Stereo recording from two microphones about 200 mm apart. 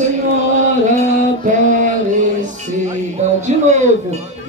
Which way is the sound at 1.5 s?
40° right (ahead or behind).